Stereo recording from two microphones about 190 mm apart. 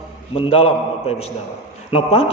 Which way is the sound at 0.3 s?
30° left (ahead or behind).